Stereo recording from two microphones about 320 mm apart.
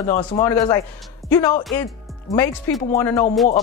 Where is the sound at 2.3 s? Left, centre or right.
Centre.